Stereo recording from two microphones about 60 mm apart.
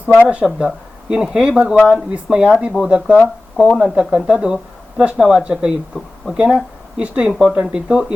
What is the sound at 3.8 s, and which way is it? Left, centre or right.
Speech, centre.